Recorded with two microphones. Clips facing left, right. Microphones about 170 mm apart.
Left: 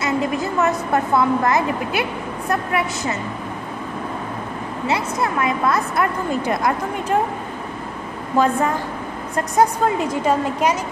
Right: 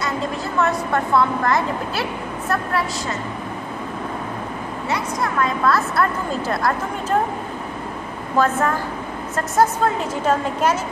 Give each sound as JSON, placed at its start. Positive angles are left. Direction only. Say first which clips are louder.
{"t": 0.6, "sound": "a woman's voice", "louder": "even", "side_deg": 20}
{"t": 4.8, "sound": "a woman's voice", "louder": "left 2 dB", "side_deg": 25}
{"t": 8.4, "sound": "a woman's voice", "louder": "left 1 dB", "side_deg": 15}